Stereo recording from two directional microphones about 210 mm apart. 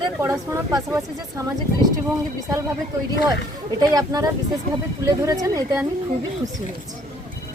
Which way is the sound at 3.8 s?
20° right (ahead or behind).